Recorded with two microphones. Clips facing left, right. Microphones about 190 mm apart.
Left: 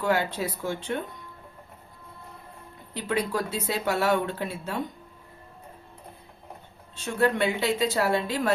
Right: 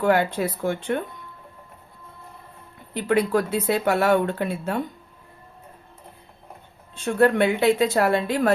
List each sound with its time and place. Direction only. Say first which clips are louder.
0.0 s speech: right 5 dB; 55° right (ahead or behind)
2.9 s speech: right 7 dB; 55° right (ahead or behind)
6.9 s speech: right 6 dB; 55° right (ahead or behind)